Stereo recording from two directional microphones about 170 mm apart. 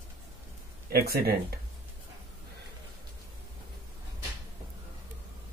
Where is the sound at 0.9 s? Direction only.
65° right (ahead or behind).